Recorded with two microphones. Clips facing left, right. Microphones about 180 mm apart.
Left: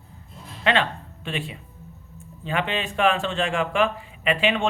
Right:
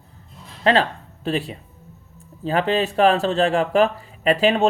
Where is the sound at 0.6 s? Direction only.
40° right (ahead or behind).